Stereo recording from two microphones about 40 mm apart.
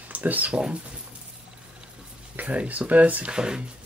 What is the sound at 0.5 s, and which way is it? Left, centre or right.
Speech, right.